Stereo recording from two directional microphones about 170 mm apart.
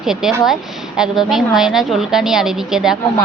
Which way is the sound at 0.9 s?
5° right (ahead or behind).